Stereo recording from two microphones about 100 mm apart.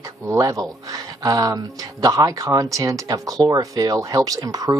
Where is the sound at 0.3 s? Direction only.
35° right (ahead or behind).